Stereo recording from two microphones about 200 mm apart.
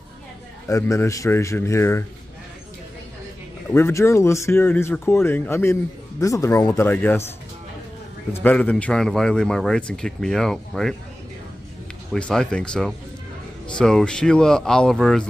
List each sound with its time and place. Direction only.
0.7 s speech: 15° left (ahead or behind)
3.7 s speech: 15° left (ahead or behind)
8.3 s speech: 10° left (ahead or behind)
12.1 s speech: 5° left (ahead or behind)